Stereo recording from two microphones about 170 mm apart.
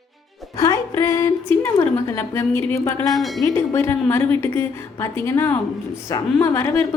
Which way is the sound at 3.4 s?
15° left (ahead or behind).